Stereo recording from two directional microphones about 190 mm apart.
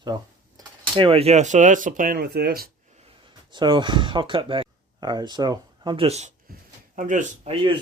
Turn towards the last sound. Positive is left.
turn(degrees=-30)  # may be behind; listen again after turning